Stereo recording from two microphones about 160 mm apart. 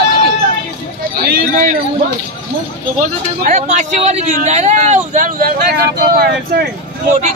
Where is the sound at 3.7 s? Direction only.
50° right (ahead or behind); by 6.7 s 75° right (ahead or behind).